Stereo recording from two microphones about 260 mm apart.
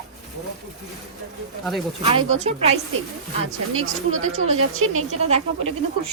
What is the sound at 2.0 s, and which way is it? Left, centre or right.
Speech, right.